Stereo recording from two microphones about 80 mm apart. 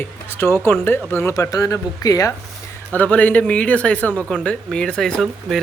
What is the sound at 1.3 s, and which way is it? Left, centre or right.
Speech, left.